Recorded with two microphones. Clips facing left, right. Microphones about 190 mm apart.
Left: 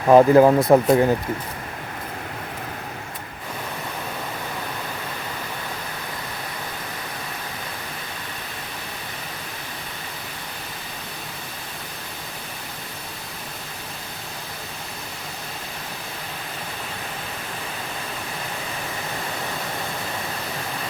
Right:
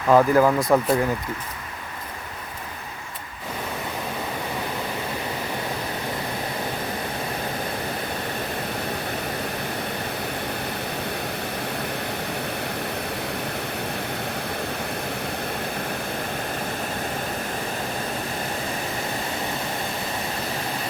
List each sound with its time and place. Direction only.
0.1 s speech: 25° left (ahead or behind)